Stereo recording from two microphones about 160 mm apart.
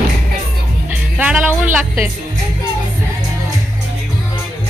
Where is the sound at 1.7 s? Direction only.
10° right (ahead or behind).